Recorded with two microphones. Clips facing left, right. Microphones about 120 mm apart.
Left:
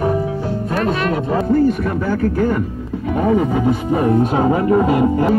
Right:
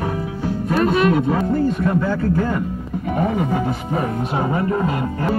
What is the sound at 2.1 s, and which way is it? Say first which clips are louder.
Speech: left 3 dB; 90° left.